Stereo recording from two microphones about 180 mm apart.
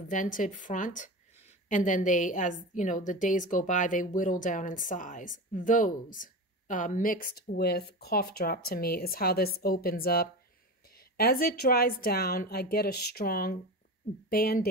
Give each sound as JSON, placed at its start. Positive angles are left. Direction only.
{"t": 0.1, "sound": "a woman's voice", "side_deg": 45}